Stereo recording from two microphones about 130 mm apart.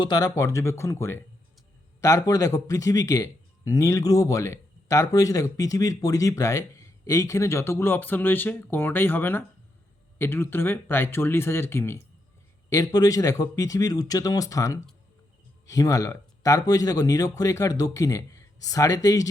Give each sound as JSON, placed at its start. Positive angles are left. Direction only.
{"t": 0.0, "sound": "a man's voice", "side_deg": 30}